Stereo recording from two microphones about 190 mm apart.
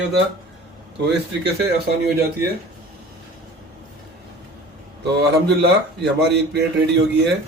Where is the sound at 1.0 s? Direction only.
65° right (ahead or behind).